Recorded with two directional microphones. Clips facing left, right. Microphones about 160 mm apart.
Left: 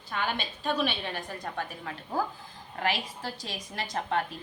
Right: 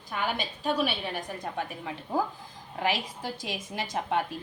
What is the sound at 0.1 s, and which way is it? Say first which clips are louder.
A woman's voice: right 1 dB; 10° right (ahead or behind).